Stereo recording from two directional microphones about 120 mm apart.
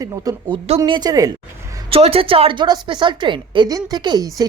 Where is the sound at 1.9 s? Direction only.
55° right (ahead or behind); by 4.4 s 35° right (ahead or behind).